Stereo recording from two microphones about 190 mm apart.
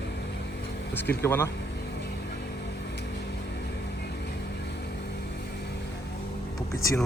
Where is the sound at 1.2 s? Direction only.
10° left (ahead or behind).